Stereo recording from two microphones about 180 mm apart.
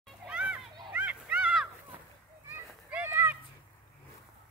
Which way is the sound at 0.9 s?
10° right (ahead or behind).